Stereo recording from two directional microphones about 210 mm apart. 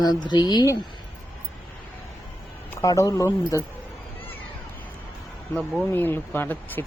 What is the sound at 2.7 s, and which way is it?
Speech, 15° left (ahead or behind).